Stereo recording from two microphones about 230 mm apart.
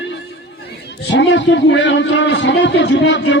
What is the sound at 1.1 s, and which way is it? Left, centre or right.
A man's voice, left.